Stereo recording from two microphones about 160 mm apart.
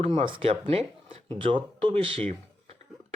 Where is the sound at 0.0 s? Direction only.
35° right (ahead or behind).